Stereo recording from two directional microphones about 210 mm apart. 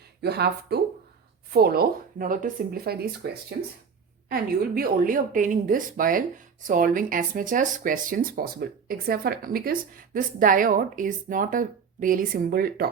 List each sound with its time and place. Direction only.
0.2 s a woman's voice: 50° right (ahead or behind)